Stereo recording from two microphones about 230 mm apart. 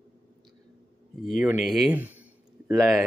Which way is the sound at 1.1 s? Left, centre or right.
Centre.